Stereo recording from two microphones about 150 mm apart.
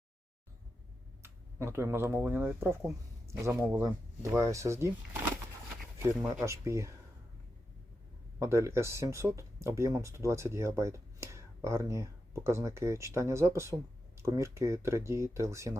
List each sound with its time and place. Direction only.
1.2 s speech: 15° right (ahead or behind)
6.0 s speech: 15° right (ahead or behind)
8.4 s speech: 20° right (ahead or behind)